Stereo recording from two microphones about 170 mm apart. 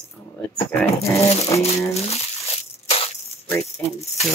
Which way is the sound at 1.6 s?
40° left (ahead or behind).